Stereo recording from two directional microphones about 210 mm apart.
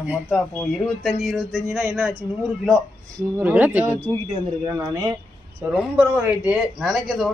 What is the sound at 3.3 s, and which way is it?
A man's voice, 10° right (ahead or behind).